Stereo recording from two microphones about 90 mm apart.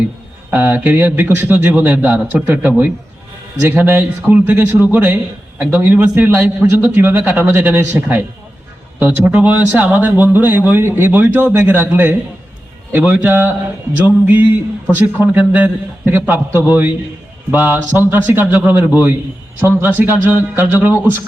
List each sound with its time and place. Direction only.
0.5 s a man's voice: 20° right (ahead or behind)